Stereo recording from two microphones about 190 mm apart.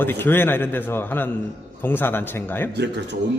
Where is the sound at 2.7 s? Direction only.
65° right (ahead or behind).